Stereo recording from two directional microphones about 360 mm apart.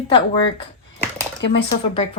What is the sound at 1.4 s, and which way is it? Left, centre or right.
Speech, left.